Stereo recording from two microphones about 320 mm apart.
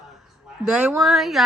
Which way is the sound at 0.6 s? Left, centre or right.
Centre.